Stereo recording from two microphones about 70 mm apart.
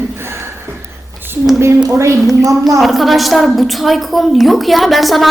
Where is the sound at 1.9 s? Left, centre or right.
Right.